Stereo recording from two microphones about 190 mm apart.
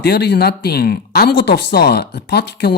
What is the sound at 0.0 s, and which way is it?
Speech, 60° left (ahead or behind).